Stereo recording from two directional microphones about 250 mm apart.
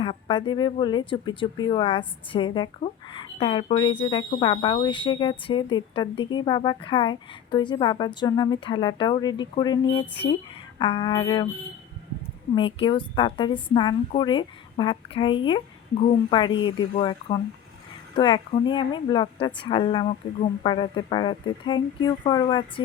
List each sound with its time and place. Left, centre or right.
0.0 s a woman's voice: centre
12.5 s a woman's voice: centre